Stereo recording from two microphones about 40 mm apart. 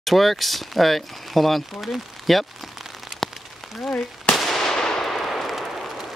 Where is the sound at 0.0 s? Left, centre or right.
Centre.